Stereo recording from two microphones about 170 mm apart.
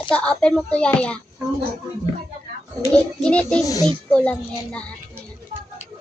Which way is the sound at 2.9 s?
5° left (ahead or behind).